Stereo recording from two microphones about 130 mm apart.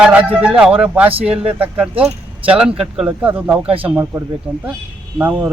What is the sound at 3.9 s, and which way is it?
A man's voice, 15° right (ahead or behind).